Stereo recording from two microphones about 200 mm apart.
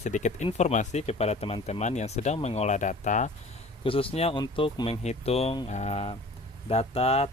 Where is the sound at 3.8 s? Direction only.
25° left (ahead or behind).